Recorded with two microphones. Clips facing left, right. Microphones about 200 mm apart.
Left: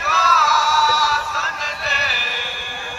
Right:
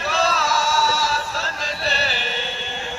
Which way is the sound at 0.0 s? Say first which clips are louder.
Even; 30° right (ahead or behind).